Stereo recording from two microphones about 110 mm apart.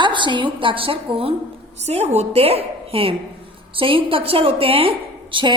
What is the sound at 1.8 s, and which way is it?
A woman's voice, 75° right (ahead or behind).